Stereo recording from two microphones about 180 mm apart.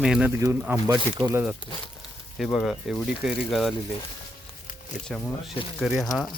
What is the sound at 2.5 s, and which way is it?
Speech, 5° left (ahead or behind).